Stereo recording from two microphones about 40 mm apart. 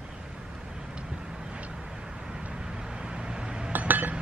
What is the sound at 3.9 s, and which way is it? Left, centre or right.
Chink, right.